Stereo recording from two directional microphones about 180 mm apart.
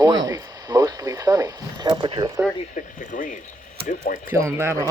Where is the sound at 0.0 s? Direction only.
20° right (ahead or behind).